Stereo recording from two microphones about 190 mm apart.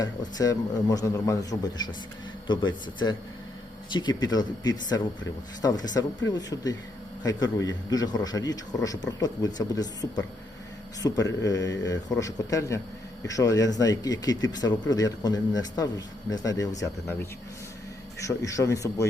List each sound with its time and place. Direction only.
0.0 s a man's voice: 20° left (ahead or behind)